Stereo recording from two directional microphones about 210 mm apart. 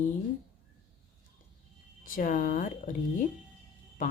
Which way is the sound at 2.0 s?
40° left (ahead or behind).